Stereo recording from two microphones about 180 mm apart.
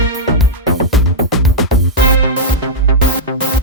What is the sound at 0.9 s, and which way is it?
Music, centre (ahead or behind).